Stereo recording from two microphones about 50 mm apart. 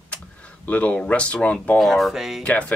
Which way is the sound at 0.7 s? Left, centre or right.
Left.